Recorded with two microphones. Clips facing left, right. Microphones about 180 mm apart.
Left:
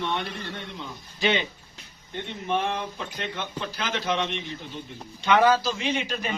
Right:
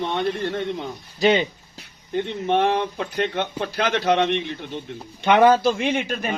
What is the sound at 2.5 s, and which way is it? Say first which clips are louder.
A man's voice: right 7 dB; 65° right (ahead or behind).